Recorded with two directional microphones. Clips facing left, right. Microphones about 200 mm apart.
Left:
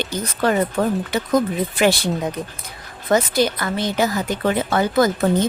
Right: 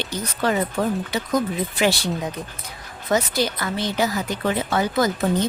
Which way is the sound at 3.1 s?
50° left (ahead or behind).